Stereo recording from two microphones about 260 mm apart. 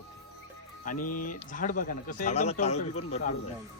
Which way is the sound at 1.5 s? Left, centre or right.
Left.